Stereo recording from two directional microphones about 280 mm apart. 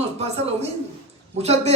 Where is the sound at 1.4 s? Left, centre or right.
Right.